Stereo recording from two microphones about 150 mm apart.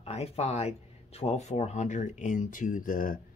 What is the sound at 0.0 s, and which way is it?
Speech, 45° left (ahead or behind).